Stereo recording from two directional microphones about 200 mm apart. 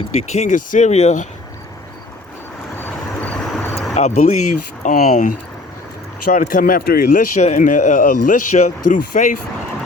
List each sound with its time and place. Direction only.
0.2 s speech: 35° left (ahead or behind)
2.7 s vehicle: 10° left (ahead or behind)
3.9 s speech: 35° left (ahead or behind)